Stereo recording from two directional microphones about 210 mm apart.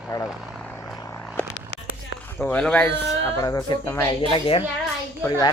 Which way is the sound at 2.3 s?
5° left (ahead or behind).